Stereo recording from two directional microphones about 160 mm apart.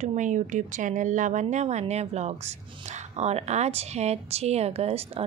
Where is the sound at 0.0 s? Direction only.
50° right (ahead or behind).